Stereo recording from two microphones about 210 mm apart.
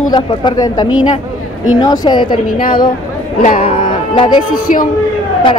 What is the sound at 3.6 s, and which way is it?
Music, 25° left (ahead or behind).